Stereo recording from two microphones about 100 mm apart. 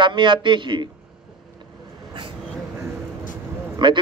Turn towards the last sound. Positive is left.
turn(degrees=-55)  # may be behind; listen again after turning